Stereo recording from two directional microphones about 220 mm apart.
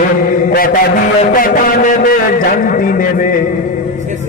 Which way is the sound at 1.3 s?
40° left (ahead or behind).